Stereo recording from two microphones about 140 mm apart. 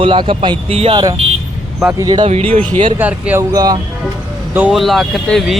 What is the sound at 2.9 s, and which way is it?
Speech, 10° right (ahead or behind).